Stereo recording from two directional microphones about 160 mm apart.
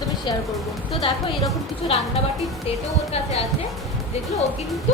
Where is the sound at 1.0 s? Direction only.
35° left (ahead or behind).